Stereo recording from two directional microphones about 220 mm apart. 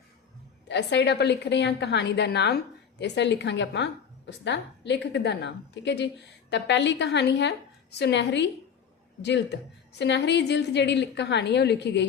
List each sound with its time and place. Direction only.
0.7 s a woman's voice: 50° left (ahead or behind)